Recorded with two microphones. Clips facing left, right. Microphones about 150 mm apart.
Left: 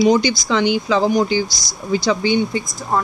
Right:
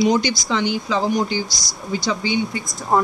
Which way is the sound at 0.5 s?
80° left.